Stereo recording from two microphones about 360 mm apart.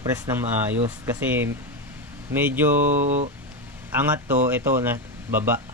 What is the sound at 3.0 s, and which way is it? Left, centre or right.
Speech, centre.